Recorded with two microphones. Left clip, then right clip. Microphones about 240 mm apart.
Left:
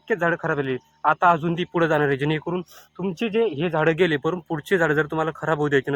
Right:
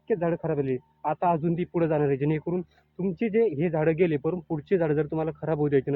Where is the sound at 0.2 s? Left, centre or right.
Centre.